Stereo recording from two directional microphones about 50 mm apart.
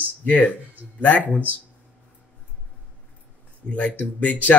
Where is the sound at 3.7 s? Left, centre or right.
Left.